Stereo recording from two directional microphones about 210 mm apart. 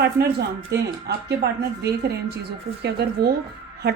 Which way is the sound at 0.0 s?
50° right (ahead or behind).